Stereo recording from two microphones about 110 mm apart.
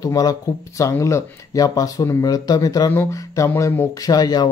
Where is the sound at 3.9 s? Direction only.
35° left (ahead or behind).